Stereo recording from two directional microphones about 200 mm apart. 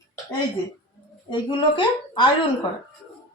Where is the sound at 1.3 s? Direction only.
25° left (ahead or behind).